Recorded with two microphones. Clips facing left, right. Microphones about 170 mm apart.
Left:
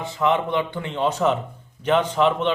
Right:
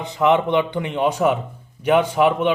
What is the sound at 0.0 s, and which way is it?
A man's voice, 20° right (ahead or behind).